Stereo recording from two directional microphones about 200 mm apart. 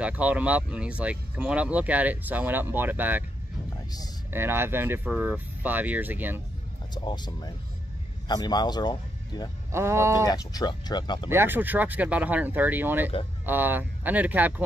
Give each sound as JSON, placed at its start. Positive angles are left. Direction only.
{"t": 0.0, "sound": "speech", "side_deg": -5}
{"t": 4.3, "sound": "speech", "side_deg": -10}
{"t": 6.9, "sound": "speech", "side_deg": 20}
{"t": 9.7, "sound": "speech", "side_deg": -15}
{"t": 10.2, "sound": "speech", "side_deg": 20}
{"t": 11.2, "sound": "speech", "side_deg": -10}